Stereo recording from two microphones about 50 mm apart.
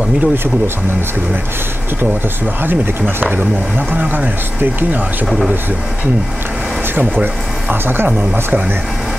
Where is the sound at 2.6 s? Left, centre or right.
Right.